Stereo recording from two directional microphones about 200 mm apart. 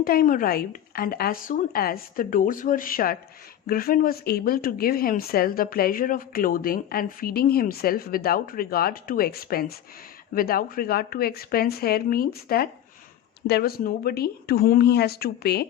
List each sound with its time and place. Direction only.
0.0 s speech: 45° left (ahead or behind)